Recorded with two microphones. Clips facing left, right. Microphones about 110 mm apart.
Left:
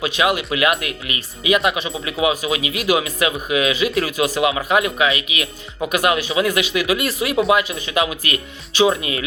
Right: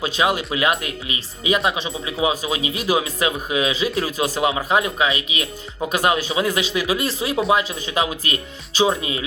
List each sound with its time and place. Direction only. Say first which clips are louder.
0.0 s speech: left 1 dB; 40° right (ahead or behind)
0.8 s speech: left 1 dB; 65° left (ahead or behind)
1.5 s speech: left 2 dB; 35° right (ahead or behind)